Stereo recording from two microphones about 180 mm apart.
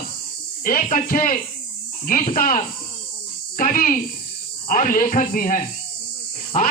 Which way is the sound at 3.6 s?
50° left (ahead or behind).